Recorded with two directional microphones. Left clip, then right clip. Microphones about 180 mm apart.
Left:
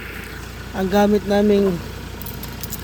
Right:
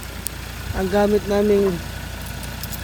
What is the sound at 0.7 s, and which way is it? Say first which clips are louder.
Speech: left 1 dB; 15° left (ahead or behind).